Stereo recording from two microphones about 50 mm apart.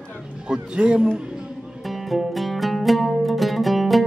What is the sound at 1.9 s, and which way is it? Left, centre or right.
Music, centre.